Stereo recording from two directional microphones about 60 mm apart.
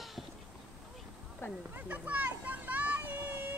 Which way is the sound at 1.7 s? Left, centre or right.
Right.